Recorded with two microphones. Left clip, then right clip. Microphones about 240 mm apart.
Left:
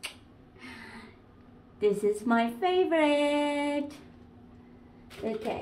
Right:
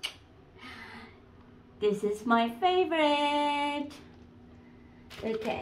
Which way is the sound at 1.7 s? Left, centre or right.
Centre.